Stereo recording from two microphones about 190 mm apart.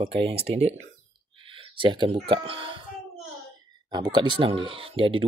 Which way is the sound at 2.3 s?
30° right (ahead or behind).